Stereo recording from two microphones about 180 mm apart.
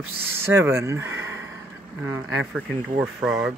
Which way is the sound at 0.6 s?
15° right (ahead or behind).